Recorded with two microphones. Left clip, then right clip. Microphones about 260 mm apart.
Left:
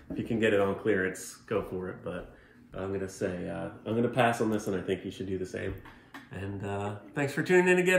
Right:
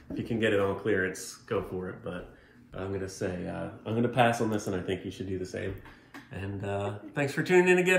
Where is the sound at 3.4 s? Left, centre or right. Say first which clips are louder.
Left 1 dB; centre.